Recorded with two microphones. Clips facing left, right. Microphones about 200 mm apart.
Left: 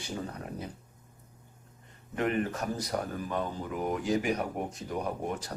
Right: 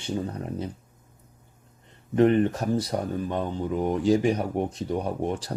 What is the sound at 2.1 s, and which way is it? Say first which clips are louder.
Speech: right 10 dB; 30° right (ahead or behind).